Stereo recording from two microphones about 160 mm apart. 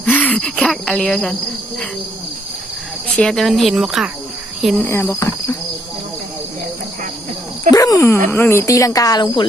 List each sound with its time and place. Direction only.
0.0 s speech: 10° left (ahead or behind)
3.2 s speech: centre (ahead or behind)
4.8 s cricket: 15° left (ahead or behind)
7.7 s speech: 20° left (ahead or behind)